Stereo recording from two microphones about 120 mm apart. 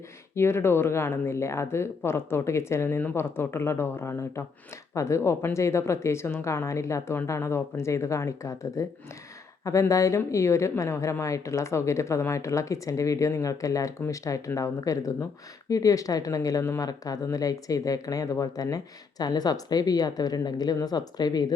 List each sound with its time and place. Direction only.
0.3 s a woman's voice: 20° left (ahead or behind)